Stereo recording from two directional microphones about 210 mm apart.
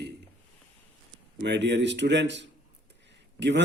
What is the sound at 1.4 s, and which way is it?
A man's voice, 55° right (ahead or behind).